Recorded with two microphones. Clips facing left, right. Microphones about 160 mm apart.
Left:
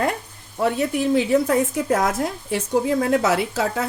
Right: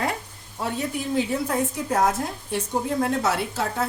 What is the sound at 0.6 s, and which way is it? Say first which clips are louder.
Speech: left 7 dB; 70° left (ahead or behind).